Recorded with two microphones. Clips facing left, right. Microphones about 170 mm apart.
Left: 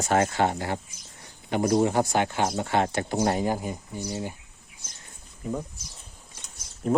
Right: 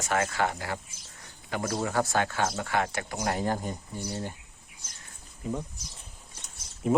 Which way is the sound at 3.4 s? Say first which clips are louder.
Left 2 dB; 10° left (ahead or behind).